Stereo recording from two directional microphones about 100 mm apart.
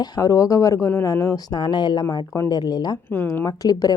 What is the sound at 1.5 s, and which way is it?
Speech, 50° left (ahead or behind).